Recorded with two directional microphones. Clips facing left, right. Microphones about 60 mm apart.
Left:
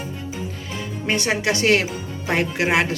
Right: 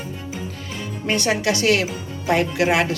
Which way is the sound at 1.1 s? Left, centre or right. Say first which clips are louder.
Right 1 dB; centre.